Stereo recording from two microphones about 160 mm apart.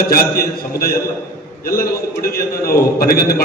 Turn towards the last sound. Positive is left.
turn(degrees=65)  # may be behind; listen again after turning